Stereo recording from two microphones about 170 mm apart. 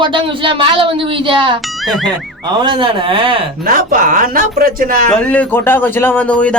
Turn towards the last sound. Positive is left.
turn(degrees=5)  # may be behind; listen again after turning